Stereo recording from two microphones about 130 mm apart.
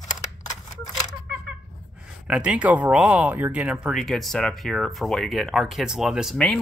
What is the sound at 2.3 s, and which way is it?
Speech, 10° right (ahead or behind).